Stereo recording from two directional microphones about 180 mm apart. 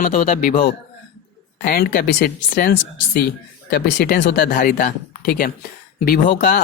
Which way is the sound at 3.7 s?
65° left (ahead or behind).